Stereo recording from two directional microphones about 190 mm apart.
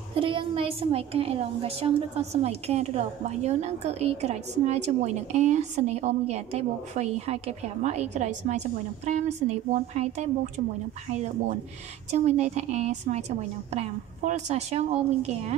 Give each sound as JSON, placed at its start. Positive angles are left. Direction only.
{"t": 0.1, "sound": "a woman's voice", "side_deg": -25}